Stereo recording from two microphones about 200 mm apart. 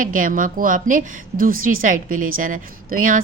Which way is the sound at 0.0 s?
40° right (ahead or behind).